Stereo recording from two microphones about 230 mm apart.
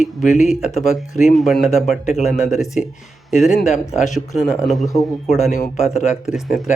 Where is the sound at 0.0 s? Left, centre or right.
Left.